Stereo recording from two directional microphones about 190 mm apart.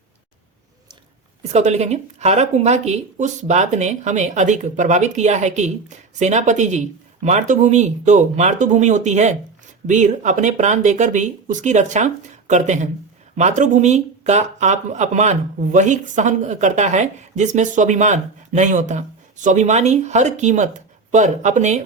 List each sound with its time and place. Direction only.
1.5 s speech: 35° right (ahead or behind)